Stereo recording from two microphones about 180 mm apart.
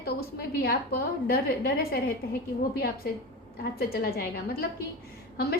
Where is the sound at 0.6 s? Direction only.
55° left (ahead or behind).